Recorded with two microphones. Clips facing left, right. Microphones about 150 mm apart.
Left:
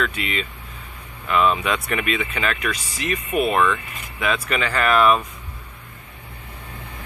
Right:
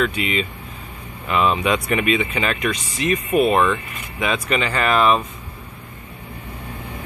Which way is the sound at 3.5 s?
30° right (ahead or behind).